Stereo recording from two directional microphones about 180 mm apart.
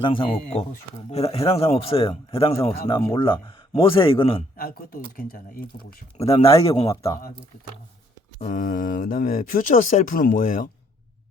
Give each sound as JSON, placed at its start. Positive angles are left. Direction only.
{"t": 0.0, "sound": "a man's voice", "side_deg": 30}
{"t": 4.5, "sound": "speech", "side_deg": 55}
{"t": 6.1, "sound": "a man's voice", "side_deg": 35}
{"t": 8.4, "sound": "speech", "side_deg": 45}